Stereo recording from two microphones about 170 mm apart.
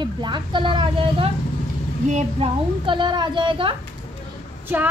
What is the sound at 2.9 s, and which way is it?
Speech, 25° right (ahead or behind).